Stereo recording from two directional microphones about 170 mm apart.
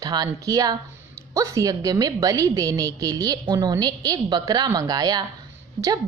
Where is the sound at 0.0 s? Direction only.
20° right (ahead or behind).